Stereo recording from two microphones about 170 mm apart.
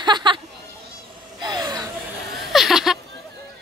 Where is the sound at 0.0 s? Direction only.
25° right (ahead or behind).